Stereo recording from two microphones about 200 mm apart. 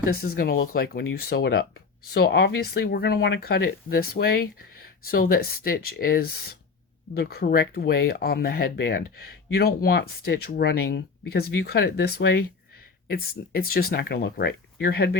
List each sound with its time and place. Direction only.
0.1 s speech: 50° left (ahead or behind)